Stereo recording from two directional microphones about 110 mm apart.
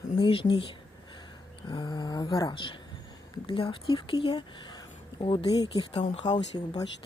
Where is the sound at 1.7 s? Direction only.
40° left (ahead or behind).